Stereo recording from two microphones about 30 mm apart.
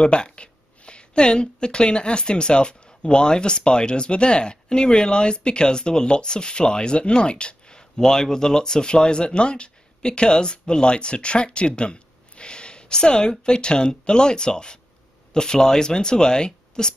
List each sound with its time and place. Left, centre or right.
0.0 s speech: left